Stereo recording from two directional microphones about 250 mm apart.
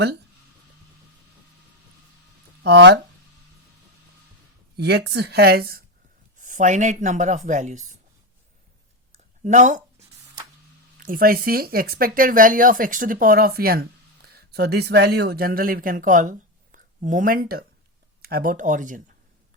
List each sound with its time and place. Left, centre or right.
2.6 s speech: right
4.8 s speech: right
9.4 s speech: right
10.9 s speech: right